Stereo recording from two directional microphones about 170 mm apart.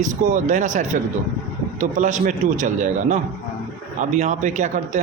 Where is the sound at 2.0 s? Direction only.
45° right (ahead or behind).